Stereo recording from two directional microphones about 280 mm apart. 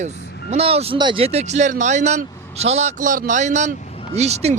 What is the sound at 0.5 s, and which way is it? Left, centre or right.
Speech, right.